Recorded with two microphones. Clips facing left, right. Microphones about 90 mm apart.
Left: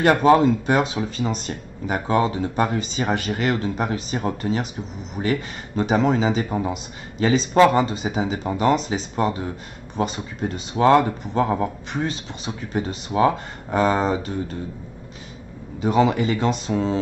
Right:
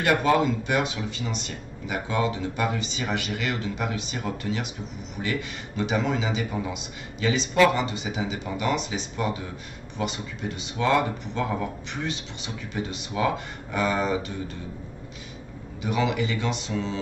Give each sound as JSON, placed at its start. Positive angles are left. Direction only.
{"t": 0.0, "sound": "speech", "side_deg": 35}
{"t": 15.8, "sound": "speech", "side_deg": 35}